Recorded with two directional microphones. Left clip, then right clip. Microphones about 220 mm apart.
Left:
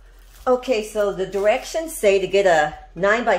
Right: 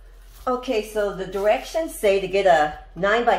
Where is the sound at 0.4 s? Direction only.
55° left (ahead or behind).